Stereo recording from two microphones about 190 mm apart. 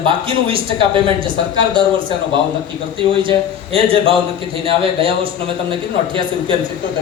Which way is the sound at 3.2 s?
30° right (ahead or behind).